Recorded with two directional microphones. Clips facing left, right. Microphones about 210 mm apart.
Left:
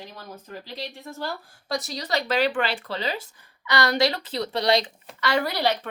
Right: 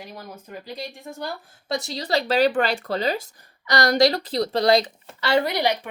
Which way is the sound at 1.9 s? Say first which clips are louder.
Right 4 dB; 30° right (ahead or behind).